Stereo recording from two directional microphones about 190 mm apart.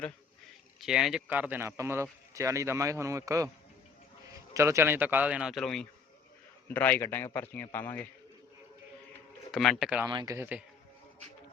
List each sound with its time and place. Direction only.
0.8 s a man's voice: centre (ahead or behind)
9.5 s speech: centre (ahead or behind)
10.1 s speech: 20° right (ahead or behind)